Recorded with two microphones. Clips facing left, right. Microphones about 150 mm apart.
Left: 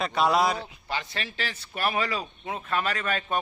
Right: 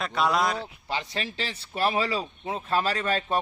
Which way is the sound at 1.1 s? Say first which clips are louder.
Right 2 dB; 30° right (ahead or behind).